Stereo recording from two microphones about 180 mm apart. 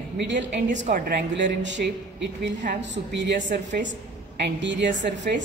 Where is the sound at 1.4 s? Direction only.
80° right.